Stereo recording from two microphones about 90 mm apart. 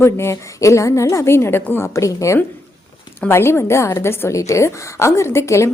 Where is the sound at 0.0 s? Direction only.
30° left (ahead or behind).